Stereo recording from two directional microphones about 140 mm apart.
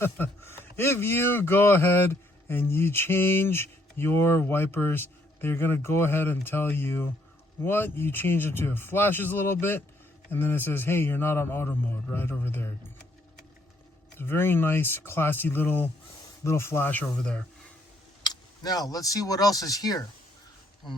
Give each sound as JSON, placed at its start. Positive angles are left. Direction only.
{"t": 0.0, "sound": "speech", "side_deg": 15}
{"t": 14.2, "sound": "speech", "side_deg": 15}
{"t": 18.2, "sound": "speech", "side_deg": 30}